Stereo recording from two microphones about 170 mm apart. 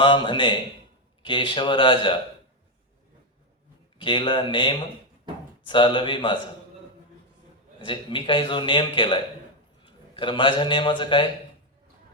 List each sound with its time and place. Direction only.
0.0 s speech: 30° left (ahead or behind)
3.9 s speech: 30° left (ahead or behind)
7.9 s a man's voice: 30° left (ahead or behind)